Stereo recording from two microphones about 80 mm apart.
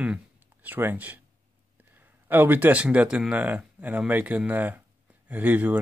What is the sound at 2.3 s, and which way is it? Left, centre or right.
Speech, right.